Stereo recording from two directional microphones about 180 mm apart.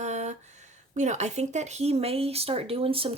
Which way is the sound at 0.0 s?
40° right (ahead or behind).